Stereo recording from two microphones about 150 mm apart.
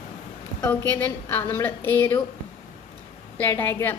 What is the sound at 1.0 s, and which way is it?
A woman's voice, 15° left (ahead or behind).